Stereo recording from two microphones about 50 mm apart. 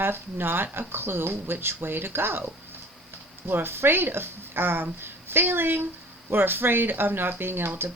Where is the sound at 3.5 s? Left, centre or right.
Right.